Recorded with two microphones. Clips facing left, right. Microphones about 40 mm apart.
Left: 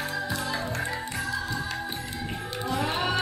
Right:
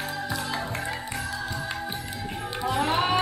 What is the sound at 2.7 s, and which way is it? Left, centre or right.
Music, centre.